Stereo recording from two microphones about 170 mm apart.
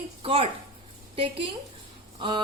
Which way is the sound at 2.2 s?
30° right (ahead or behind).